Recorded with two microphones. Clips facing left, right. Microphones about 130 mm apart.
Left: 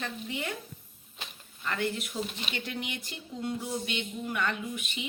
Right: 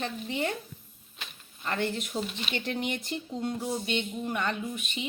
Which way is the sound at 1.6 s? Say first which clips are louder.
Right 1 dB; 35° right (ahead or behind).